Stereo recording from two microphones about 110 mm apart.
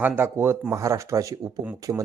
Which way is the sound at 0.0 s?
20° right (ahead or behind).